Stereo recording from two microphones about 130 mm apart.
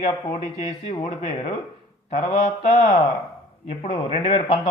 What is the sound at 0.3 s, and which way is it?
A man's voice, 65° left (ahead or behind).